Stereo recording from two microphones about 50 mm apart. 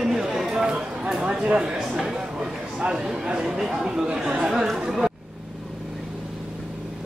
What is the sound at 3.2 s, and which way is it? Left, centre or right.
Speech, centre.